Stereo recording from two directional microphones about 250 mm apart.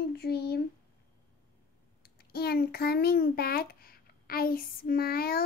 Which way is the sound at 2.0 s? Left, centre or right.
Left.